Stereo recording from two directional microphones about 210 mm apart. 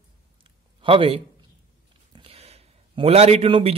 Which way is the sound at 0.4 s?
25° right (ahead or behind).